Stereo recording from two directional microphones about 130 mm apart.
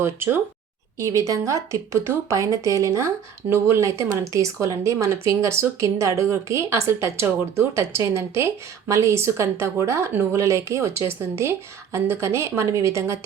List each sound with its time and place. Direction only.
0.0 s speech: 20° right (ahead or behind)